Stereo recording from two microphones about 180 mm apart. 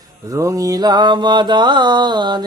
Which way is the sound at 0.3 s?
20° right (ahead or behind).